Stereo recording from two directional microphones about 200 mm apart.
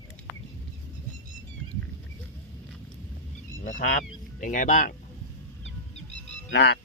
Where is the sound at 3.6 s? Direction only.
40° left (ahead or behind).